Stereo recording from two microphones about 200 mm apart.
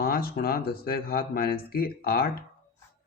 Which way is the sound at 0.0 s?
50° left (ahead or behind).